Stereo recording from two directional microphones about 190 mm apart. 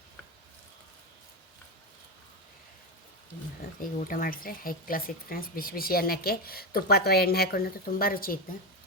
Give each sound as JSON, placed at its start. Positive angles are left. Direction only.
{"t": 3.8, "sound": "speech", "side_deg": 45}